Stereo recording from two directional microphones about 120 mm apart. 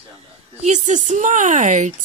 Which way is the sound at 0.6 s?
85° right.